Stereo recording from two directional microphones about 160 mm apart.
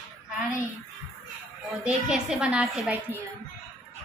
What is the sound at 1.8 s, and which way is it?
A woman's voice, 5° right (ahead or behind).